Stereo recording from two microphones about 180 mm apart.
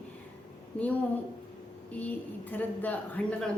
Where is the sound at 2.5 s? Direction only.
10° left (ahead or behind).